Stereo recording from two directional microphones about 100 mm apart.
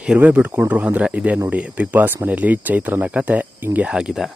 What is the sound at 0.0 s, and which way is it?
Speech, 15° right (ahead or behind).